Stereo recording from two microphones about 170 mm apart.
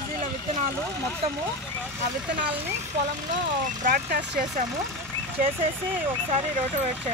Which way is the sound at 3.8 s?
50° right (ahead or behind).